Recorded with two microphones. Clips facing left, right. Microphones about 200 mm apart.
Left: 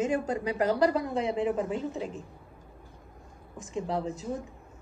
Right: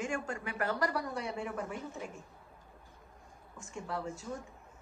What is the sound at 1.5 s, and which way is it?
Speech, 20° left (ahead or behind).